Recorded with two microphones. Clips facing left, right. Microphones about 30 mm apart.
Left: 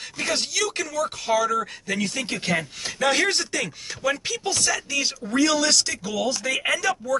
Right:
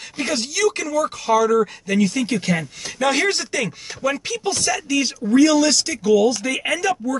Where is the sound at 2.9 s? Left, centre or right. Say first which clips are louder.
Right 2 dB; centre.